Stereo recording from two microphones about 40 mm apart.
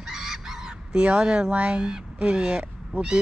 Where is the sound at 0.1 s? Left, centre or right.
Centre.